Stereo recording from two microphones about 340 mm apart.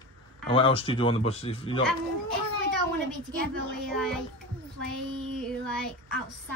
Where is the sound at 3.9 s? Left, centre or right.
Centre.